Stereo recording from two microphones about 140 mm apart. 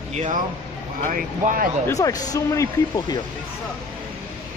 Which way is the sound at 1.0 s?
70° right (ahead or behind).